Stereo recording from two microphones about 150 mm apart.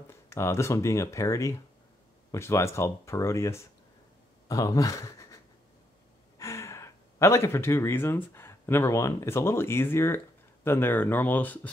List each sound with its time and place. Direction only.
0.1 s speech: 20° left (ahead or behind)